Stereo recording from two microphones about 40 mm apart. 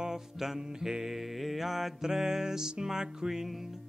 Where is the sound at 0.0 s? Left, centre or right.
Centre.